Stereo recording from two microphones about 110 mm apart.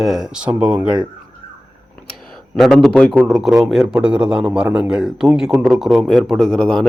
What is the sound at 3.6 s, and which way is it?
A man's voice, 5° right (ahead or behind).